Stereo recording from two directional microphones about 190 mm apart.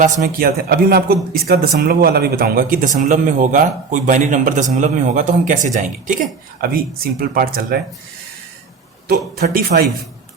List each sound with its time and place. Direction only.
0.0 s speech: 45° right (ahead or behind)
9.4 s speech: 55° right (ahead or behind)